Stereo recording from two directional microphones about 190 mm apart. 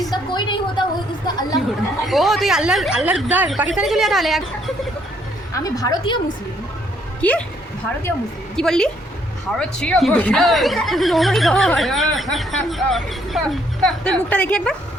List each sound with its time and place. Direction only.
0.1 s a sound: 25° left (ahead or behind)
2.0 s speech: centre (ahead or behind)
5.5 s a woman's voice: 20° left (ahead or behind)
7.2 s speech: 10° left (ahead or behind)
8.5 s speech: 5° left (ahead or behind)